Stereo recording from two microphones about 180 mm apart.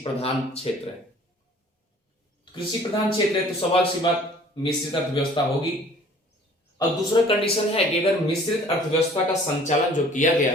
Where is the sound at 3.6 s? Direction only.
30° left (ahead or behind).